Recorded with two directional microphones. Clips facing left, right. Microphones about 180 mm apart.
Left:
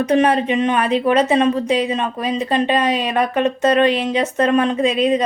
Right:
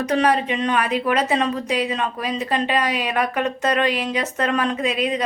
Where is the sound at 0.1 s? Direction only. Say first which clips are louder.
Left 3 dB; 25° left (ahead or behind).